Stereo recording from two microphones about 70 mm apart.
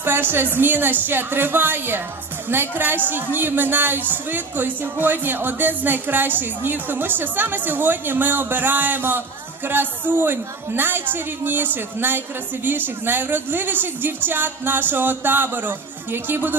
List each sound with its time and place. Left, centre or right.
0.0 s a woman's voice: right